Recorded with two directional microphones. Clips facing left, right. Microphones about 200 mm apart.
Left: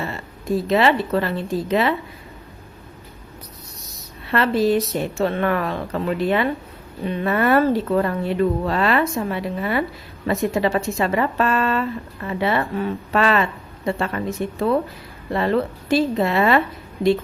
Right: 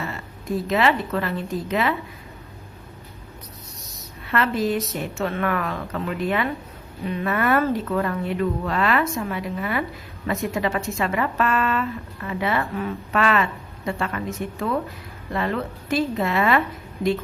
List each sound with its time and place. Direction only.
0.0 s speech: 30° left (ahead or behind)
4.3 s speech: 30° left (ahead or behind)